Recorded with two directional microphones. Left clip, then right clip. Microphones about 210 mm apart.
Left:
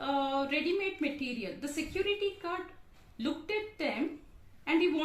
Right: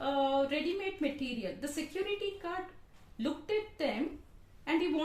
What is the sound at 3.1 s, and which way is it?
Speech, 60° right (ahead or behind).